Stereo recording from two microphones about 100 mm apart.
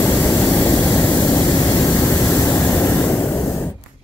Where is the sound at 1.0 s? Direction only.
30° left (ahead or behind).